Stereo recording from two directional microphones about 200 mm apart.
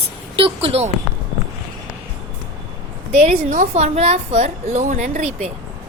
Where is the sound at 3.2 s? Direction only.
35° right (ahead or behind).